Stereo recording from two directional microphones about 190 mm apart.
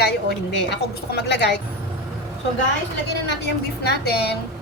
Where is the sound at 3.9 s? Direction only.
60° left (ahead or behind).